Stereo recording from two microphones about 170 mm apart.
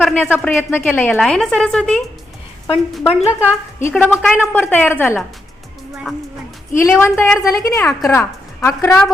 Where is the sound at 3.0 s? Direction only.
35° left (ahead or behind).